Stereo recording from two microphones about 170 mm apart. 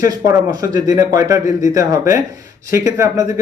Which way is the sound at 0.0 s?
20° right (ahead or behind).